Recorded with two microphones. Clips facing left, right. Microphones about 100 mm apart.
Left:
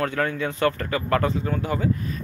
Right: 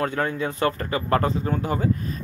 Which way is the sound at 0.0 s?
30° right (ahead or behind).